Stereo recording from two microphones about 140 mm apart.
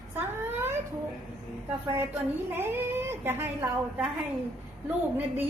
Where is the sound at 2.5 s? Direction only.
15° right (ahead or behind).